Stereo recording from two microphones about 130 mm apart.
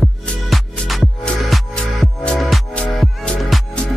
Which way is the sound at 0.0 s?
Centre (ahead or behind).